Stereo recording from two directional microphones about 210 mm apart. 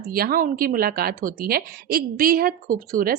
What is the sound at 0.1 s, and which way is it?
A woman's voice, 45° right (ahead or behind).